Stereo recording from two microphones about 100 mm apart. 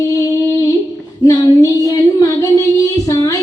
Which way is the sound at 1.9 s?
35° left (ahead or behind).